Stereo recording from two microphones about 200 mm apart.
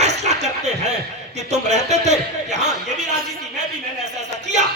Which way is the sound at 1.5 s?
35° right (ahead or behind).